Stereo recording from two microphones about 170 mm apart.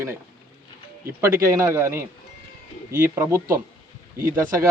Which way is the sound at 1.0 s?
15° right (ahead or behind).